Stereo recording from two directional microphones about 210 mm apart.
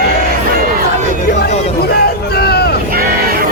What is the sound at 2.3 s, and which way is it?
Vehicle, 50° left (ahead or behind).